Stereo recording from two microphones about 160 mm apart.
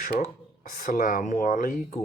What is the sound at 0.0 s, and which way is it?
Speech, 55° left (ahead or behind).